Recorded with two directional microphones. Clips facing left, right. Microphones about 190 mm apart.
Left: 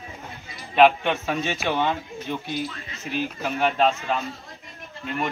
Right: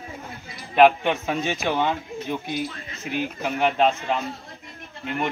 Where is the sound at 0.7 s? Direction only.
10° right (ahead or behind).